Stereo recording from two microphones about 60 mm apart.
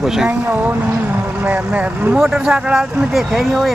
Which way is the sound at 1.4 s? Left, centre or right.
Right.